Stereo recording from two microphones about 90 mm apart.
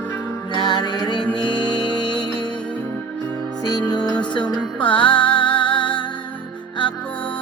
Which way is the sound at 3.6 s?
50° left (ahead or behind).